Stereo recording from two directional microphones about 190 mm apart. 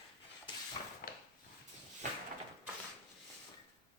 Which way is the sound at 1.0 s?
50° left (ahead or behind).